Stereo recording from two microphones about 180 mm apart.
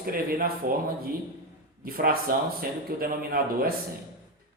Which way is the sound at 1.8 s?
55° right (ahead or behind).